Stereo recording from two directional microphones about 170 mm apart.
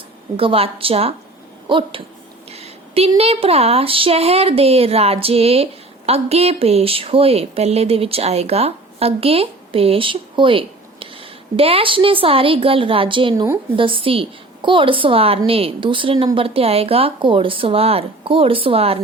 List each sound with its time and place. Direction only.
0.3 s speech: 35° right (ahead or behind)
2.5 s a sound: 35° right (ahead or behind)
3.2 s speech: 35° right (ahead or behind)
13.3 s speech: 15° right (ahead or behind)
13.7 s speech: 30° right (ahead or behind)